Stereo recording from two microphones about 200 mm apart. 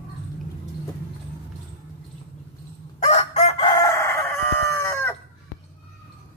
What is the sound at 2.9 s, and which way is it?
Chicken, 35° left (ahead or behind).